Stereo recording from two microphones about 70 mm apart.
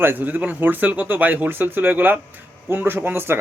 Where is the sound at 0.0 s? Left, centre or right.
Right.